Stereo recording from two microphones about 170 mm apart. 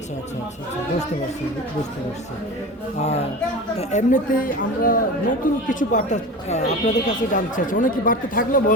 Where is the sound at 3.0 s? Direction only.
40° left (ahead or behind).